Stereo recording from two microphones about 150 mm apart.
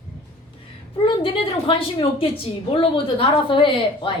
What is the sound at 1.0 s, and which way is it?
A woman's voice, 35° left (ahead or behind).